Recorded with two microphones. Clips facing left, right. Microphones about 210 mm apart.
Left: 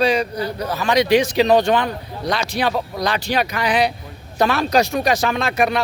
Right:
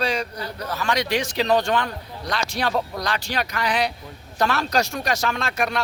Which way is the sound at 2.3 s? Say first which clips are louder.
Left 4 dB; 5° left (ahead or behind).